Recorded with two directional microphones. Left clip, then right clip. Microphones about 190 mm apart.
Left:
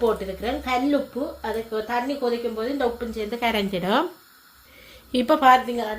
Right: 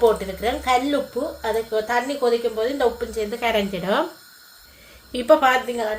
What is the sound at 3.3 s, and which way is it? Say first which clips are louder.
Speech: right 1 dB; 55° left (ahead or behind).